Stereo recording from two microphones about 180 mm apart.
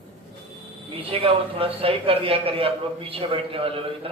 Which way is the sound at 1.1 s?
30° right (ahead or behind).